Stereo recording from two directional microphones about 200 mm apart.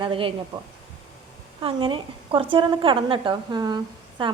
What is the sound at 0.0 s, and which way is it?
Speech, 25° right (ahead or behind).